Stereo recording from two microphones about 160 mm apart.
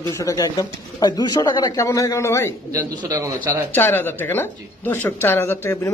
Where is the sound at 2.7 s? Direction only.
20° right (ahead or behind).